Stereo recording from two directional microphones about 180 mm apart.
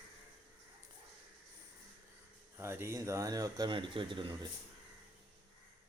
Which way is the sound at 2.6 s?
15° right (ahead or behind).